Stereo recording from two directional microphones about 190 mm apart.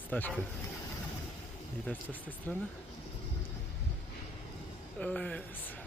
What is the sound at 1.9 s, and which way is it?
Speech, 10° left (ahead or behind).